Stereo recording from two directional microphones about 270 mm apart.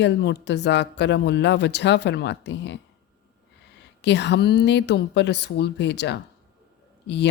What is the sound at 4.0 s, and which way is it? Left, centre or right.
Speech, left.